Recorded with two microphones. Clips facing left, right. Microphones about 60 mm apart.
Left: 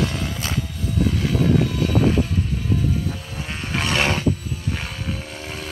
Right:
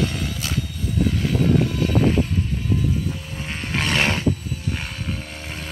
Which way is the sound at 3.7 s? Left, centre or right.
Right.